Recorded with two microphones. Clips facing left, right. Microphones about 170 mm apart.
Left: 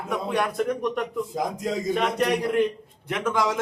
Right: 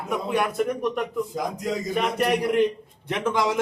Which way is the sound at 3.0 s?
20° right (ahead or behind).